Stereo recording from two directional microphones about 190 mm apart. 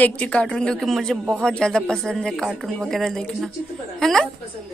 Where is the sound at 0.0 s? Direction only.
5° left (ahead or behind).